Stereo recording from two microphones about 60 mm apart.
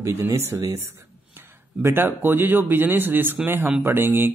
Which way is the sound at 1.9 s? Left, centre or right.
Right.